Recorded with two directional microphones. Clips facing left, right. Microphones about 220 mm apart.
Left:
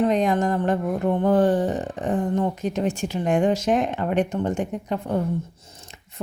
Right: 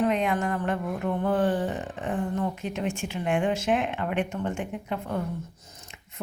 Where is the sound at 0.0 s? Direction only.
35° left (ahead or behind).